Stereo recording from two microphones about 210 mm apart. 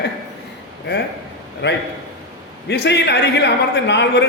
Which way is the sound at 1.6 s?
55° left (ahead or behind).